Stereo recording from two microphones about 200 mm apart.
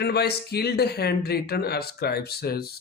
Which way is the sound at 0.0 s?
55° left (ahead or behind).